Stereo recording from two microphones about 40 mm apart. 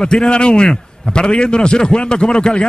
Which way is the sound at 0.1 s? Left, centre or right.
Left.